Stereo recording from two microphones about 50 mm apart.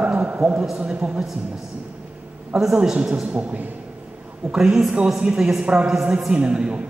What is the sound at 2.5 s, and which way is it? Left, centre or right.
A man's voice, centre.